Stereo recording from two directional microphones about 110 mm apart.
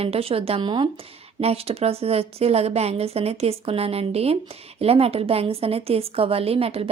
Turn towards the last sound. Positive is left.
turn(degrees=-65)  # may be behind; listen again after turning